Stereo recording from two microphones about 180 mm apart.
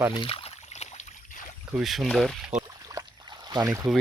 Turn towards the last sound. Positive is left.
turn(degrees=-20)  # may be behind; listen again after turning